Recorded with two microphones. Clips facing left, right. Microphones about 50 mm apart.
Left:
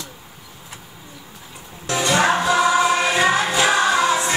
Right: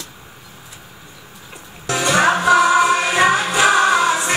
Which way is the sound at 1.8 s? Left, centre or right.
Right.